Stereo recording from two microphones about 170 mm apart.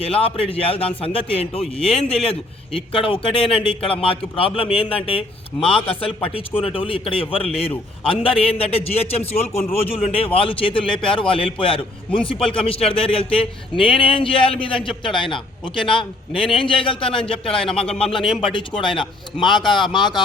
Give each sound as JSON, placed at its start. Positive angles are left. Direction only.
{"t": 0.0, "sound": "a man's voice", "side_deg": 35}